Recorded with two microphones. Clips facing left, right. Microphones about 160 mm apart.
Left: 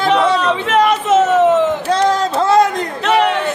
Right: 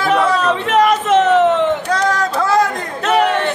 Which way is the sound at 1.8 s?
25° left (ahead or behind).